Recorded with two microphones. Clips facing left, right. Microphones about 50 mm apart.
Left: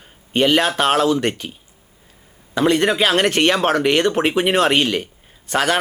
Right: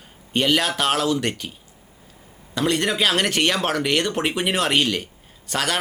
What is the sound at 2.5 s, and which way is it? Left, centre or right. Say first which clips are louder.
Speech: left 5 dB; centre.